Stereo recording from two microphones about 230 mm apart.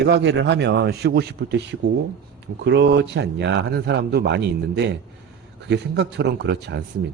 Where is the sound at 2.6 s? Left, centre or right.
Right.